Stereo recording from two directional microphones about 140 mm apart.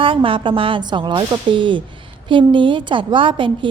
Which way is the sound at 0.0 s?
40° right (ahead or behind).